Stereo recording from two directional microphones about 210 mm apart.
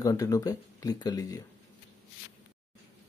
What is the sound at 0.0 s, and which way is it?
Speech, 15° left (ahead or behind).